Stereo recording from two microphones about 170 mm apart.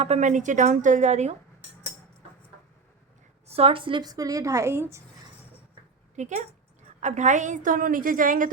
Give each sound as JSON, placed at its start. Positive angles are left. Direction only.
{"t": 0.0, "sound": "a woman's voice", "side_deg": -40}
{"t": 3.4, "sound": "a woman's voice", "side_deg": -35}
{"t": 6.1, "sound": "a woman's voice", "side_deg": -45}